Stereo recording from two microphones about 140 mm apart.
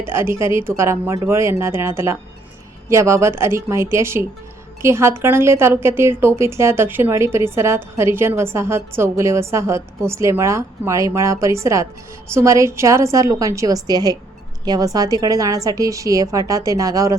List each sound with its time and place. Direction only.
0.0 s a woman's voice: 15° right (ahead or behind)